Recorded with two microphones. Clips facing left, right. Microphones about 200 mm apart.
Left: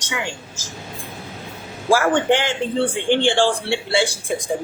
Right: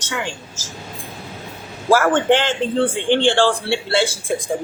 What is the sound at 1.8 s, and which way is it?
A man's voice, 15° left (ahead or behind).